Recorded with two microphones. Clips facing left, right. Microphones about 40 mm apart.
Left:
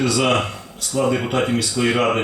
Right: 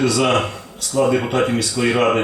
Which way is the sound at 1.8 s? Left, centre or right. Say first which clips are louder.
Right 2 dB; centre.